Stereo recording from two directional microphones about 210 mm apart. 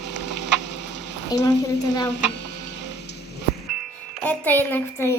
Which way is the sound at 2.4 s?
55° left (ahead or behind).